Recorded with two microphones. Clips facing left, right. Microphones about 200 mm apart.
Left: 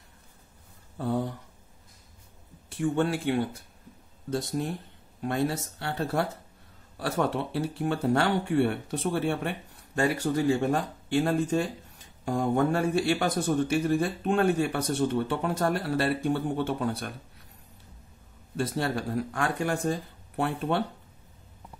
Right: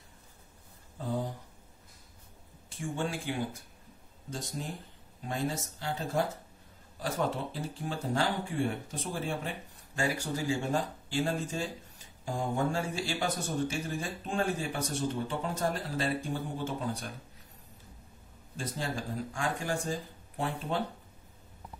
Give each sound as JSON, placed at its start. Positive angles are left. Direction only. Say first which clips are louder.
{"t": 0.9, "sound": "speech", "louder": "left 5 dB", "side_deg": 65}
{"t": 2.8, "sound": "speech", "louder": "left 8 dB", "side_deg": 65}
{"t": 18.6, "sound": "speech", "louder": "left 7 dB", "side_deg": 65}